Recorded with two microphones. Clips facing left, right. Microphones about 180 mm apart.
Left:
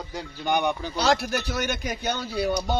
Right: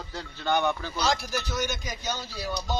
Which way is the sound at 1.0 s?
65° left (ahead or behind).